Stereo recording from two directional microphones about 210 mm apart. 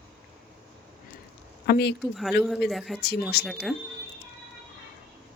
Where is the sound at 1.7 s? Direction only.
50° left (ahead or behind).